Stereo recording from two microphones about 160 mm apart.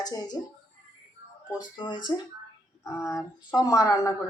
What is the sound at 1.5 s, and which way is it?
Speech, 30° left (ahead or behind).